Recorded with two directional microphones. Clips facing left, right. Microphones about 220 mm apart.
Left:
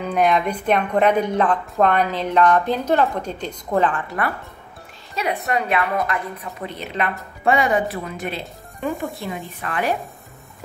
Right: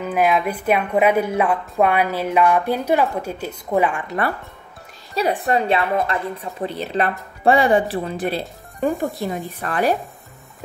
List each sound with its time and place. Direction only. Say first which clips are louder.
0.0 s a woman's voice: even; 5° right (ahead or behind)
5.1 s a woman's voice: right 4 dB; 35° right (ahead or behind)